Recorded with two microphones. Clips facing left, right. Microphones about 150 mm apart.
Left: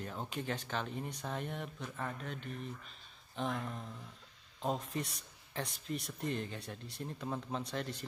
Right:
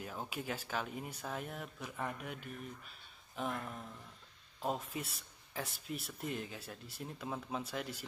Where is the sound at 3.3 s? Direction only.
5° right (ahead or behind).